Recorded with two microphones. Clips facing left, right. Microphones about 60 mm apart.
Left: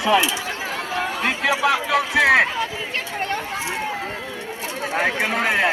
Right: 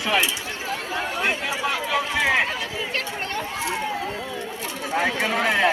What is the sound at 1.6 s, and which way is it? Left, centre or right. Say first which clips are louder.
Speech: left 3 dB; left.